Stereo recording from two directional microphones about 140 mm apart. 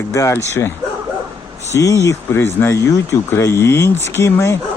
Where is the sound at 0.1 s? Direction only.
20° left (ahead or behind).